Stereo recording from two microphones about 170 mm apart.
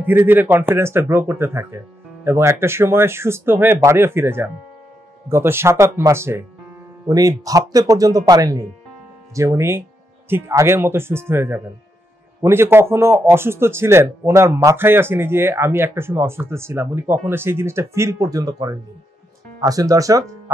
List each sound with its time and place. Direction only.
0.0 s a man's voice: 10° right (ahead or behind)